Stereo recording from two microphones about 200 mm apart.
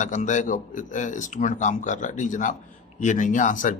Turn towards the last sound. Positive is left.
turn(degrees=40)  # may be behind; listen again after turning